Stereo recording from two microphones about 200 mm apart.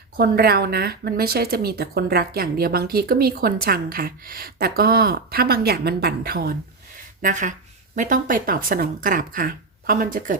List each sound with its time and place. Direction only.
0.2 s speech: 50° right (ahead or behind)